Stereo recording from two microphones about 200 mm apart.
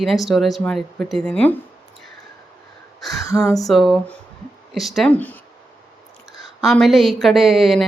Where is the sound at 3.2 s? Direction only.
15° left (ahead or behind).